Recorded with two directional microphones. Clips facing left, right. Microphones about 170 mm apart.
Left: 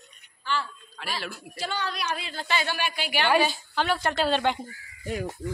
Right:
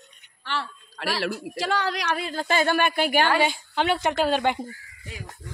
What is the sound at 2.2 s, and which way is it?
Speech, 45° right (ahead or behind).